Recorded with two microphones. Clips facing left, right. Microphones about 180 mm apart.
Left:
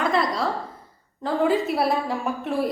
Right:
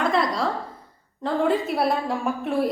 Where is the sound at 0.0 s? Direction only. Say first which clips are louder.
Even; centre (ahead or behind).